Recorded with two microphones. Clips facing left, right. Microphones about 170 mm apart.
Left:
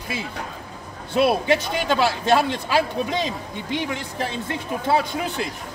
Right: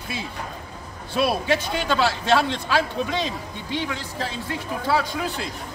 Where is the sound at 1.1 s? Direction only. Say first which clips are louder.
Left 3 dB; 15° left (ahead or behind).